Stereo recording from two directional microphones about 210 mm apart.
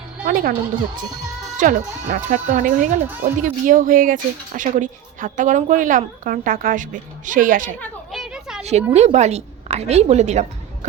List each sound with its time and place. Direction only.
0.3 s speech: 45° right (ahead or behind)
1.5 s speech: 40° right (ahead or behind)
3.0 s speech: 10° right (ahead or behind)
3.4 s speech: 40° right (ahead or behind)
7.8 s children playing: centre (ahead or behind)
8.9 s speech: 30° right (ahead or behind)